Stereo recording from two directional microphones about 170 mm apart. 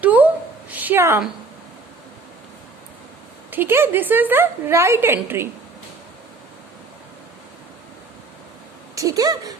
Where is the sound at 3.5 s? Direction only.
10° right (ahead or behind).